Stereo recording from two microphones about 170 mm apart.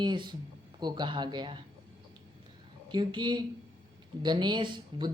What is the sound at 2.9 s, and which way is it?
A woman's voice, 25° right (ahead or behind).